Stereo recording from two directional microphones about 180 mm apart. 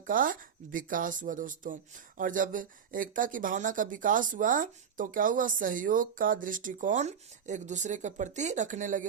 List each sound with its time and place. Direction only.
0.0 s speech: 50° right (ahead or behind)